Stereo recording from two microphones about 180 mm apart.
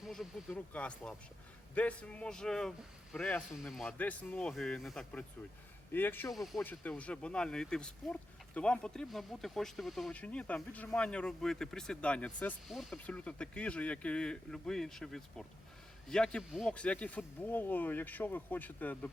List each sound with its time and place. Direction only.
0.0 s a sound: centre (ahead or behind)
0.5 s speech: 10° left (ahead or behind)
6.3 s speech: centre (ahead or behind)